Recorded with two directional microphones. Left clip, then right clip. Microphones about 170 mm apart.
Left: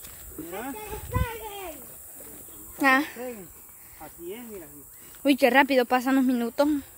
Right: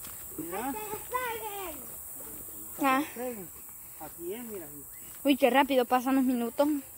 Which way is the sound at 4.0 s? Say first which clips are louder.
Even; 5° left (ahead or behind).